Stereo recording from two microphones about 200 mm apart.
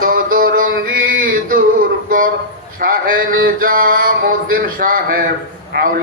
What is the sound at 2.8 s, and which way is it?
Mantra, 45° right (ahead or behind).